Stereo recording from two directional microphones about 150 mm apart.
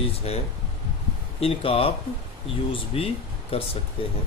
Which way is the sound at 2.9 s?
40° left (ahead or behind).